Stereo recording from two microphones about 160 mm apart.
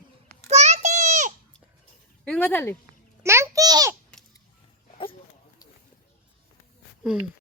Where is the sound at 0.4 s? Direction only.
45° right (ahead or behind).